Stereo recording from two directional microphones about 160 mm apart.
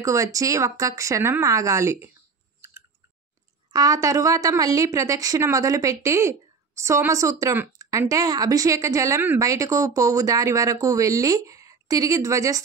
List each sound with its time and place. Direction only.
0.0 s speech: 20° right (ahead or behind)
3.7 s speech: 20° right (ahead or behind)